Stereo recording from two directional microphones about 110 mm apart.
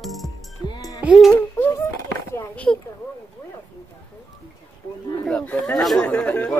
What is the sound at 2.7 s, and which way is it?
Speech, 20° left (ahead or behind).